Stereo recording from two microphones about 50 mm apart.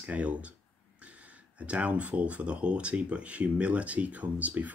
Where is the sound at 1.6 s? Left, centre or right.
Right.